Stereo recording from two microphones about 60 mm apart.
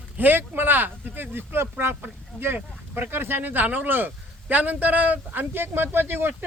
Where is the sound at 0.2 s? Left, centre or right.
Right.